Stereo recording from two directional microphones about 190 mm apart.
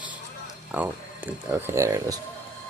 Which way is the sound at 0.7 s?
10° right (ahead or behind).